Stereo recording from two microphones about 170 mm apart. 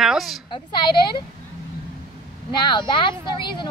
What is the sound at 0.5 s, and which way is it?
Speech, 25° left (ahead or behind).